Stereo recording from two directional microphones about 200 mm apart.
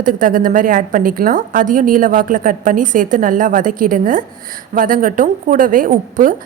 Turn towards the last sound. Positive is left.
turn(degrees=-40)  # may be behind; listen again after turning